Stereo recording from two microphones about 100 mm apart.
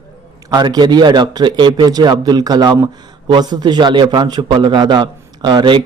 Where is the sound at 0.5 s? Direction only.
45° right (ahead or behind).